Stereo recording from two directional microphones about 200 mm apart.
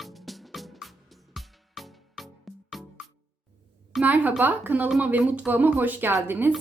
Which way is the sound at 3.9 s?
5° right (ahead or behind).